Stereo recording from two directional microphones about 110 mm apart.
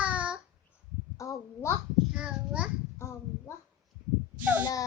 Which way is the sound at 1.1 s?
30° left (ahead or behind).